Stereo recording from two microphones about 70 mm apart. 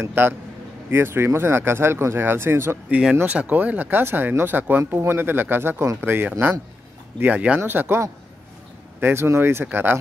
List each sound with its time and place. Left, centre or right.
0.2 s speech: right
2.9 s speech: centre
3.3 s speech: right
9.0 s speech: right